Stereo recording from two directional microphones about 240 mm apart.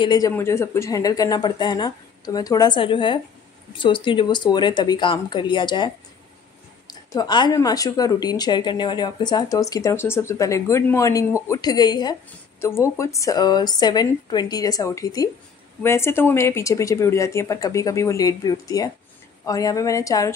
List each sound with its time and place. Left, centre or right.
0.0 s speech: centre
6.9 s speech: centre